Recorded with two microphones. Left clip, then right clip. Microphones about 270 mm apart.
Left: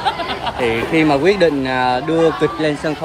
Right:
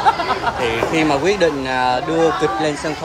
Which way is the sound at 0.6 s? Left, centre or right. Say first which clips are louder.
Left 6 dB; left.